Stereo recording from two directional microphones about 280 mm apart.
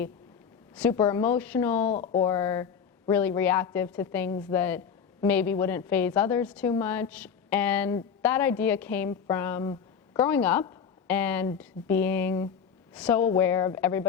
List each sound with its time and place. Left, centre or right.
0.8 s a woman's voice: centre
1.9 s speech: left
2.2 s a woman's voice: centre